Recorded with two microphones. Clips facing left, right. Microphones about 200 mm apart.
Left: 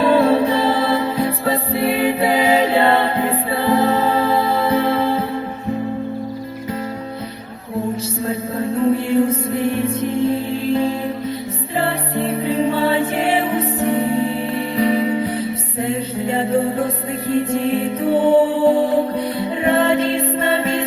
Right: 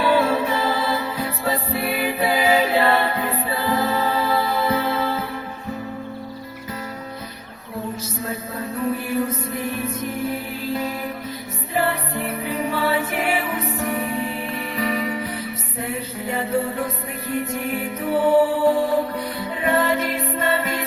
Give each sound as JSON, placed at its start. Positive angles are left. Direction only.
{"t": 0.0, "sound": "music", "side_deg": 30}
{"t": 8.3, "sound": "music", "side_deg": 30}